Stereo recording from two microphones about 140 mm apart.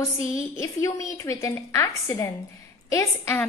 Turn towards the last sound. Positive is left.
turn(degrees=20)  # may be behind; listen again after turning